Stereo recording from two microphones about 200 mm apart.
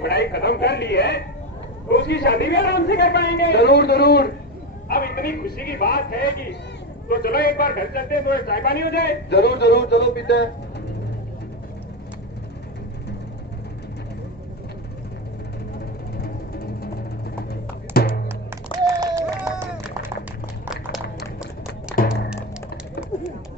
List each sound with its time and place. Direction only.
0.0 s a man's voice: 55° left (ahead or behind)
16.2 s music: 50° left (ahead or behind)
18.9 s run: 15° right (ahead or behind)
20.7 s a sound: 5° right (ahead or behind)